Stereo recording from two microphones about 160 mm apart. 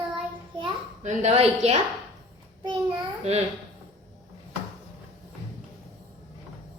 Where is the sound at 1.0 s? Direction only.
45° right (ahead or behind).